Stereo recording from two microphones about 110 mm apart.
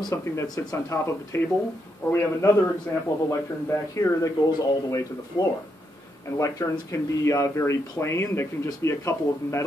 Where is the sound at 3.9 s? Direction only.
30° left (ahead or behind).